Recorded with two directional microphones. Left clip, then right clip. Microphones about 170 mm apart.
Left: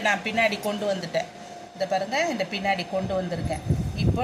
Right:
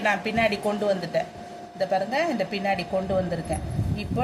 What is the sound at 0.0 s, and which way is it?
Speech, 20° right (ahead or behind).